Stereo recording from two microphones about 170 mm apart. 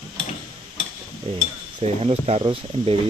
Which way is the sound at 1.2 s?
35° right (ahead or behind).